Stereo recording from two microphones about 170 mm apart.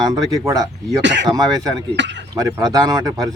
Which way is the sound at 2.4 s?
20° right (ahead or behind).